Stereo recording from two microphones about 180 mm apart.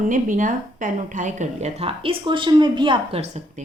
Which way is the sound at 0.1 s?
45° right (ahead or behind).